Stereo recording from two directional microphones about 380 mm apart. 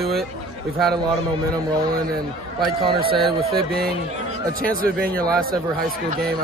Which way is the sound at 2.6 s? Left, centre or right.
Right.